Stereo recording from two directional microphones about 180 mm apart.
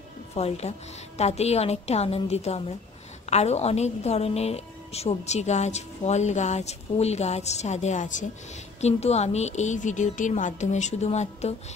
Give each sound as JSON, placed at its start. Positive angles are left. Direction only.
{"t": 0.3, "sound": "a woman's voice", "side_deg": 35}